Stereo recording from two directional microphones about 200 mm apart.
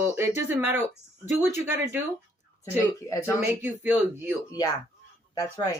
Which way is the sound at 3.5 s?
10° right (ahead or behind).